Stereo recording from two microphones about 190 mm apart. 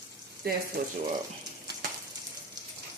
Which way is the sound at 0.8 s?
55° right (ahead or behind).